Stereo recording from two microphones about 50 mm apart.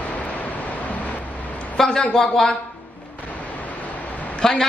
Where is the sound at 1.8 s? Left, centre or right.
Centre.